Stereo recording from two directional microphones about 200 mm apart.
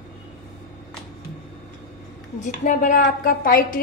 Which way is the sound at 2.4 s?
40° left (ahead or behind).